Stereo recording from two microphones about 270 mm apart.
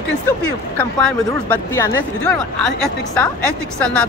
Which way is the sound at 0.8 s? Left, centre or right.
Centre.